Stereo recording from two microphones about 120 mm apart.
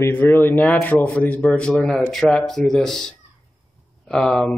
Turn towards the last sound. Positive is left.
turn(degrees=5)  # may be behind; listen again after turning